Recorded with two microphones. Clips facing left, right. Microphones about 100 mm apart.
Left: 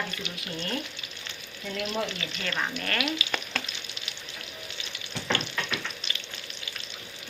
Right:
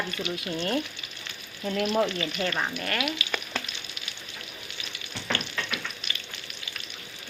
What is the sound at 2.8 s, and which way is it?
Frying, 10° right (ahead or behind).